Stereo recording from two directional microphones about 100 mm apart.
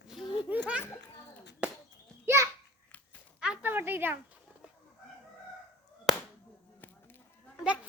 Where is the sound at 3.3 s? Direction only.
10° right (ahead or behind).